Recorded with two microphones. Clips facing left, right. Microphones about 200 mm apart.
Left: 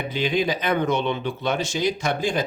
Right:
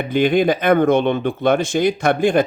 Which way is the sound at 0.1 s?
55° right (ahead or behind).